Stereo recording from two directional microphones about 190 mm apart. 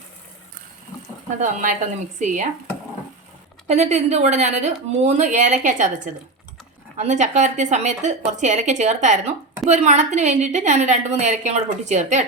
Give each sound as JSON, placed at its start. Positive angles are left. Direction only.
{"t": 1.4, "sound": "speech", "side_deg": -40}
{"t": 3.7, "sound": "speech", "side_deg": -35}
{"t": 6.9, "sound": "speech", "side_deg": -40}